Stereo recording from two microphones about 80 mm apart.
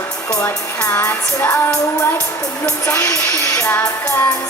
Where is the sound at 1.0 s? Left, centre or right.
Left.